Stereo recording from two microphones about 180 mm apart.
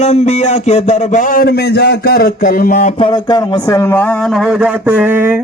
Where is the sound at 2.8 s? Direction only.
35° left (ahead or behind); by 5.4 s 10° right (ahead or behind).